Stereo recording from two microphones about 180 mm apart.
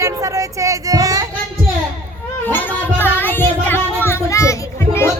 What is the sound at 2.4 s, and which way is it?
Music, 10° left (ahead or behind).